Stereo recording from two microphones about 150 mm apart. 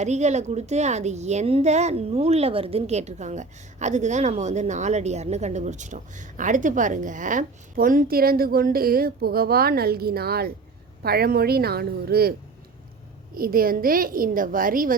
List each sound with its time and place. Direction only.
0.0 s a woman's voice: 50° right (ahead or behind); by 12.3 s 90° right
13.3 s a woman's voice: 75° right (ahead or behind)